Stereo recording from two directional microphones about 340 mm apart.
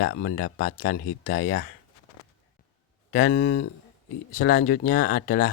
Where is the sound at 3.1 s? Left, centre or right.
Left.